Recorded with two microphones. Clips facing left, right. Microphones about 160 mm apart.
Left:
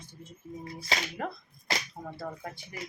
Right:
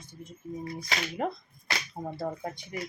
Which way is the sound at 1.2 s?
20° right (ahead or behind).